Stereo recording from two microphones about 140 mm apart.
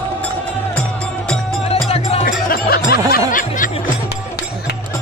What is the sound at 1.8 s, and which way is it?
Music, 45° left (ahead or behind).